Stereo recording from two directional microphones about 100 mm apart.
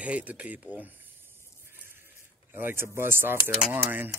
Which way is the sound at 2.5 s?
20° right (ahead or behind).